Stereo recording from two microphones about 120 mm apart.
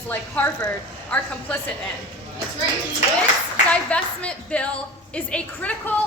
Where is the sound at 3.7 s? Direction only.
10° left (ahead or behind).